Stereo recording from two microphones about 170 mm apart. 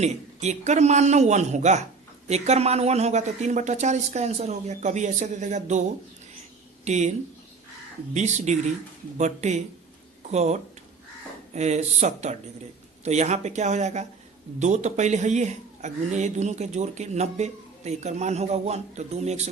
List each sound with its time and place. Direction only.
0.0 s a man's voice: 45° right (ahead or behind)
6.8 s a man's voice: 45° right (ahead or behind)
8.1 s a man's voice: 45° right (ahead or behind)